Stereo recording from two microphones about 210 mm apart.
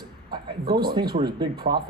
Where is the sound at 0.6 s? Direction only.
45° right (ahead or behind).